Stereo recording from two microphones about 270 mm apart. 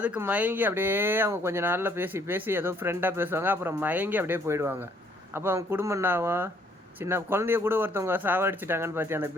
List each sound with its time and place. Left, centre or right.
0.0 s speech: centre